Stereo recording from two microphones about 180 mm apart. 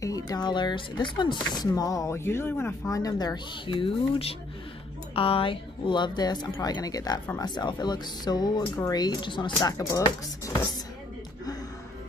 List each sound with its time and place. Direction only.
0.0 s speech: 20° left (ahead or behind)